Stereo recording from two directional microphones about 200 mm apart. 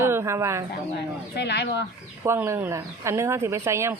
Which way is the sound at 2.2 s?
10° right (ahead or behind).